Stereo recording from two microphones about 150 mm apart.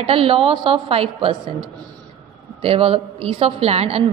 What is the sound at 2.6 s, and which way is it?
A woman's voice, 40° right (ahead or behind).